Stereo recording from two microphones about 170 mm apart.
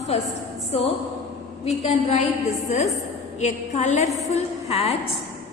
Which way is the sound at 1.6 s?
40° left (ahead or behind).